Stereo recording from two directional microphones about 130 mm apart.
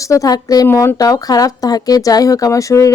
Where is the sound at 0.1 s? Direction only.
25° left (ahead or behind).